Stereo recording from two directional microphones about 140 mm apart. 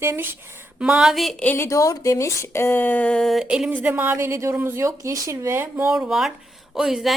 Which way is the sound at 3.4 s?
5° right (ahead or behind).